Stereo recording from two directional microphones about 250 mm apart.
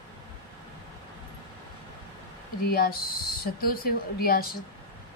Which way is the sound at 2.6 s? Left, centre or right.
Left.